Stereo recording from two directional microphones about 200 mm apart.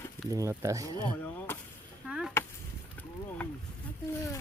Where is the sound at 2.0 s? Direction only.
Centre (ahead or behind).